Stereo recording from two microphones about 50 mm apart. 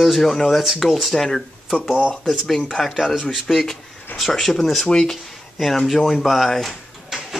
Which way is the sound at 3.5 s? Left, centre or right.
Centre.